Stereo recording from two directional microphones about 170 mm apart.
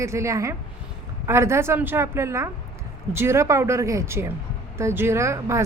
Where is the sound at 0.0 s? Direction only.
15° right (ahead or behind).